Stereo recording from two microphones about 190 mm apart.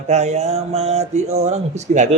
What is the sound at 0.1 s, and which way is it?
Speech, 35° right (ahead or behind).